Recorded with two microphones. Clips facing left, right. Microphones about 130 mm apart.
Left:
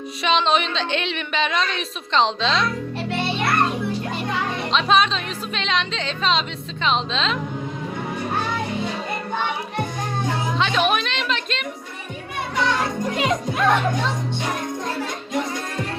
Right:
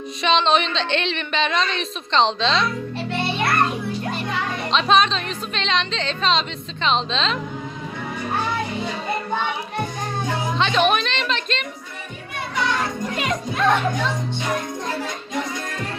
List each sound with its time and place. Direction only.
0.2 s a woman's voice: 5° left (ahead or behind)
4.7 s a woman's voice: 5° left (ahead or behind)
10.6 s music: 5° left (ahead or behind)
13.1 s music: 20° left (ahead or behind)
13.6 s a woman's voice: centre (ahead or behind)